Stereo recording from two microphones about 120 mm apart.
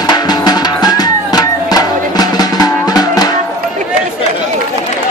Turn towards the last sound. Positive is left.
turn(degrees=30)  # may be behind; listen again after turning